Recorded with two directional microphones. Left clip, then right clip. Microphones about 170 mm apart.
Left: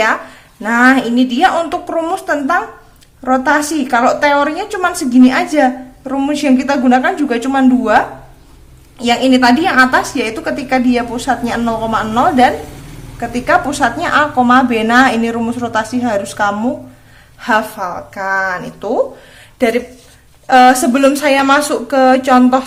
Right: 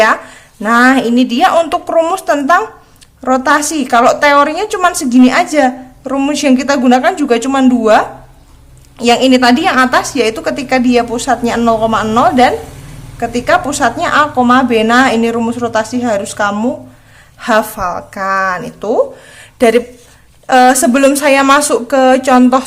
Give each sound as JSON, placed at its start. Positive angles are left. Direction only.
{"t": 0.6, "sound": "a woman's voice", "side_deg": -20}